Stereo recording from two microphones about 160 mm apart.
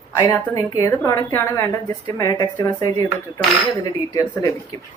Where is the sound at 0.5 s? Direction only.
20° left (ahead or behind).